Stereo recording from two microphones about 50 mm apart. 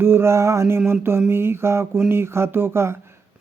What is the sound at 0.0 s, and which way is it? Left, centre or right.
Speech, right.